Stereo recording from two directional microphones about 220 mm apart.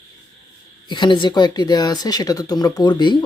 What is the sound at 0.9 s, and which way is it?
Speech, 20° left (ahead or behind).